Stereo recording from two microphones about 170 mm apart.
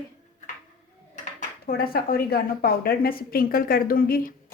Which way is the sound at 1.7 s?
65° left (ahead or behind).